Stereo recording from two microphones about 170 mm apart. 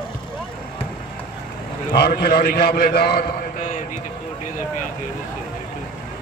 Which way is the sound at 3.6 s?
50° left (ahead or behind).